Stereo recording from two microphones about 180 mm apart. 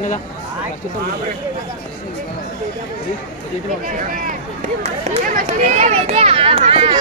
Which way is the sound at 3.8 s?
45° right (ahead or behind).